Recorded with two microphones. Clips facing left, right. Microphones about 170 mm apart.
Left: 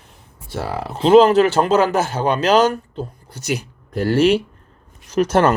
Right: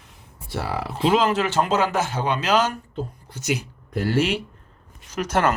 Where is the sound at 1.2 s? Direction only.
40° left (ahead or behind).